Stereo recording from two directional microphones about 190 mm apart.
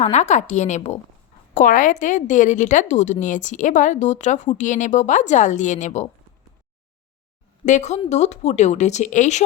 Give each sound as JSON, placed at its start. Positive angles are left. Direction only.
{"t": 0.0, "sound": "a woman's voice", "side_deg": 35}
{"t": 7.6, "sound": "a woman's voice", "side_deg": 40}